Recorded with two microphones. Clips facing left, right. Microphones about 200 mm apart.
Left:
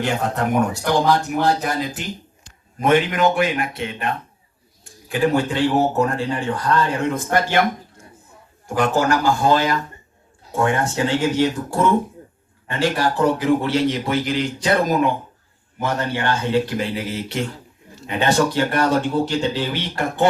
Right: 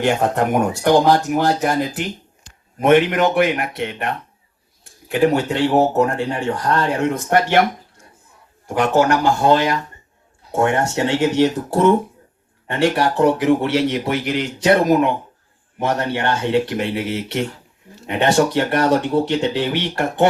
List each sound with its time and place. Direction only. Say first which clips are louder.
0.0 s speech: right 4 dB; 60° right (ahead or behind)
5.1 s speech: right 2 dB; 65° right (ahead or behind)
8.7 s speech: right 3 dB; 65° right (ahead or behind)
16.1 s speech: even; 65° right (ahead or behind)